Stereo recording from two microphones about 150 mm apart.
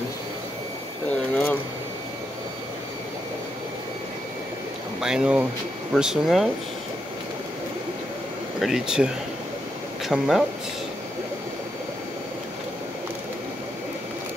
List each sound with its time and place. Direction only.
1.3 s a sound: 10° left (ahead or behind)
5.0 s speech: 5° right (ahead or behind)
8.5 s speech: centre (ahead or behind)